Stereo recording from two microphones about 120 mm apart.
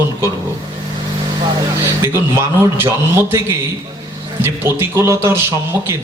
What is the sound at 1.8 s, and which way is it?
A man's voice, 20° right (ahead or behind).